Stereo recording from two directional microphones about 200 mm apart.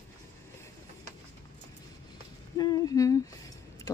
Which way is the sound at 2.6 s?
20° left (ahead or behind).